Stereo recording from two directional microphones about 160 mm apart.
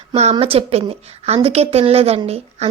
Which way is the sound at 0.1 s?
40° right (ahead or behind).